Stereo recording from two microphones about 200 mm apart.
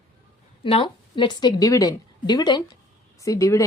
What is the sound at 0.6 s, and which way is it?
A woman's voice, 25° left (ahead or behind).